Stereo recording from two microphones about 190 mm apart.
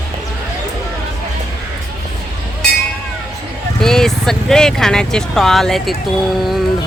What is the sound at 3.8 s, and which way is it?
Speech, 5° left (ahead or behind).